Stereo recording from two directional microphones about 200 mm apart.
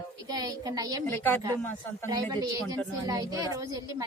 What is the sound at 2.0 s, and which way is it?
A woman's voice, 20° right (ahead or behind).